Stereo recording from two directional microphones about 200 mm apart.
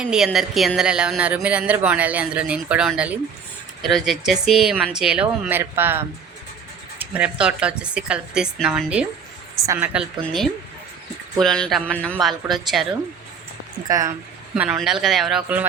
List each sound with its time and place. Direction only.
0.0 s a woman's voice: 5° right (ahead or behind)
13.8 s a woman's voice: 15° right (ahead or behind)
14.5 s speech: 5° right (ahead or behind)